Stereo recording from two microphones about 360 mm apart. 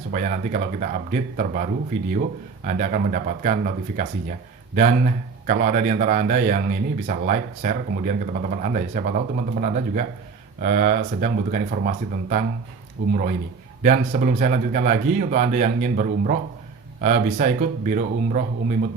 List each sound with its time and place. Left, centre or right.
0.1 s speech: right
2.6 s speech: right